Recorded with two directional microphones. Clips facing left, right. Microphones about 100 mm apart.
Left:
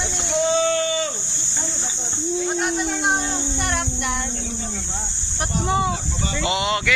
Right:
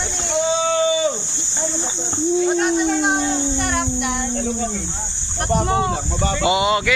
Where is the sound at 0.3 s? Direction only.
Centre (ahead or behind).